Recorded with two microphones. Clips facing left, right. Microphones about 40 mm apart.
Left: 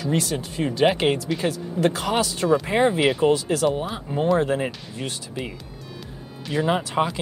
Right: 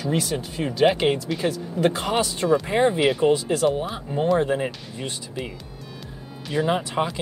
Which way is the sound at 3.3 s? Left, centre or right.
Centre.